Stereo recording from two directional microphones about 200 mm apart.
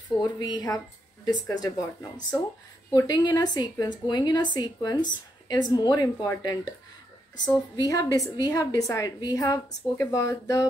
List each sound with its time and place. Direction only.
0.2 s a woman's voice: 20° left (ahead or behind)
2.9 s a woman's voice: 20° left (ahead or behind)